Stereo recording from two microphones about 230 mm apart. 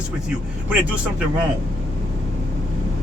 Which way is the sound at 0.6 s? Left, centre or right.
Centre.